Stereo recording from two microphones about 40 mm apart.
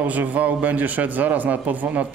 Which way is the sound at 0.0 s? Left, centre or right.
Right.